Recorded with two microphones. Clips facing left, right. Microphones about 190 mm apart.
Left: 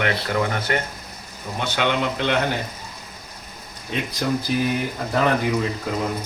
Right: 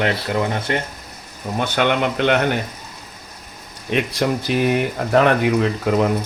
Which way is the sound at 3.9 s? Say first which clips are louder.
Right 4 dB; 70° right (ahead or behind).